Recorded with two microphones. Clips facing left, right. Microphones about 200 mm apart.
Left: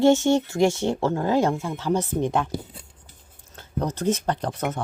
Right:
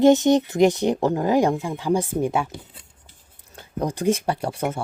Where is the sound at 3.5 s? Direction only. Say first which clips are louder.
Right 1 dB; 10° right (ahead or behind).